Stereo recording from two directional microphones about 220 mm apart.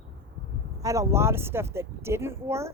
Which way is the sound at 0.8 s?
15° right (ahead or behind).